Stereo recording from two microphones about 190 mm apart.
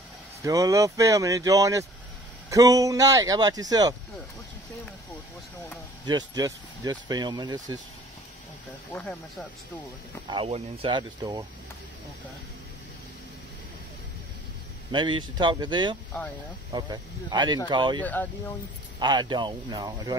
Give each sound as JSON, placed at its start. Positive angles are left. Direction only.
{"t": 0.4, "sound": "speech", "side_deg": -15}
{"t": 6.0, "sound": "speech", "side_deg": -20}
{"t": 8.9, "sound": "speech", "side_deg": 0}
{"t": 10.2, "sound": "speech", "side_deg": -25}
{"t": 14.9, "sound": "speech", "side_deg": -25}
{"t": 18.0, "sound": "speech", "side_deg": 10}
{"t": 18.9, "sound": "speech", "side_deg": -25}